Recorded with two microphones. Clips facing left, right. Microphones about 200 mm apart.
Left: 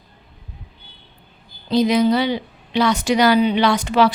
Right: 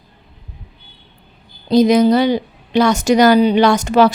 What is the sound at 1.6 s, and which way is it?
A woman's voice, 45° right (ahead or behind).